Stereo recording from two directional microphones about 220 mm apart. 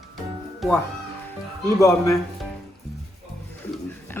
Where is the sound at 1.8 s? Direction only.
15° left (ahead or behind).